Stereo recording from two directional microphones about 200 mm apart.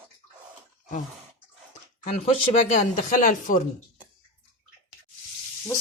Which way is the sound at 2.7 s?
40° left (ahead or behind).